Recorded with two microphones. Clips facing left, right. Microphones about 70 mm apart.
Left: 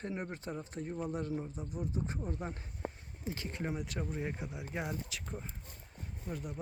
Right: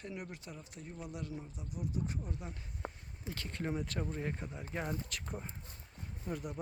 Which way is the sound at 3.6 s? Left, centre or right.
Centre.